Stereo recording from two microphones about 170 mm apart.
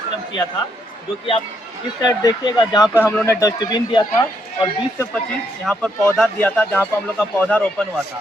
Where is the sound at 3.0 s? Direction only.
15° left (ahead or behind).